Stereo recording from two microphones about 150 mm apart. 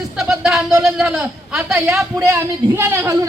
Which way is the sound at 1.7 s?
15° right (ahead or behind).